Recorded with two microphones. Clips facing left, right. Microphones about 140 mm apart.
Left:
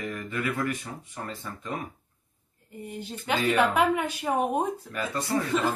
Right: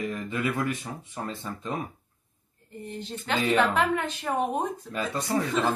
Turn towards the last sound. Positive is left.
turn(degrees=5)  # may be behind; listen again after turning